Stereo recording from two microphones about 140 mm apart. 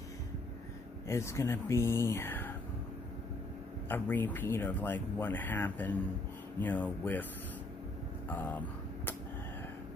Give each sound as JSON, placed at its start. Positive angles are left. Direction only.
{"t": 1.0, "sound": "speech", "side_deg": 20}
{"t": 3.9, "sound": "speech", "side_deg": 15}
{"t": 8.3, "sound": "finger snapping", "side_deg": 10}